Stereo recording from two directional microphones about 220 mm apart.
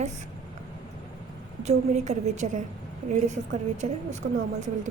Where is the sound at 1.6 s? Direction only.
30° right (ahead or behind).